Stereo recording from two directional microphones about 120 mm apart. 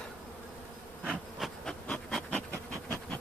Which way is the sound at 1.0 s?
10° right (ahead or behind).